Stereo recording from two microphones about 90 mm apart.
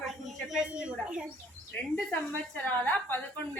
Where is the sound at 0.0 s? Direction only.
5° right (ahead or behind).